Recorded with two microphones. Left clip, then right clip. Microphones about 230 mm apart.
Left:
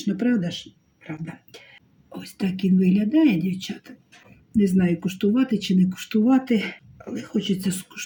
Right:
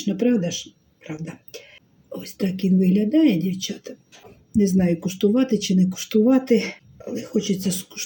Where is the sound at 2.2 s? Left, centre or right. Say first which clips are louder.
Right 2 dB; centre.